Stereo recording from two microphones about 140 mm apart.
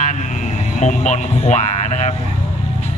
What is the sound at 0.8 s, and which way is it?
Speech, 60° left (ahead or behind).